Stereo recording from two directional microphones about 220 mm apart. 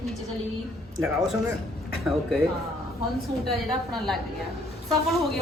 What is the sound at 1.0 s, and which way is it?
Speech, centre (ahead or behind).